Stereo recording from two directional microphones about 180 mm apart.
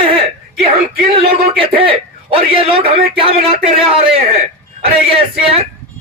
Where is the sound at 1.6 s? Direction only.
30° right (ahead or behind).